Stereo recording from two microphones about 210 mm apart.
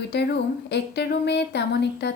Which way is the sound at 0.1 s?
50° left (ahead or behind).